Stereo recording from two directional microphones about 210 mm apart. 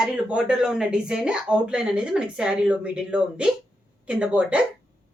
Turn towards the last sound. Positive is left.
turn(degrees=-5)  # may be behind; listen again after turning